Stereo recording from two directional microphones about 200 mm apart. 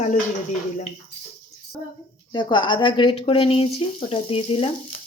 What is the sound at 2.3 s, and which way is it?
Speech, 20° left (ahead or behind).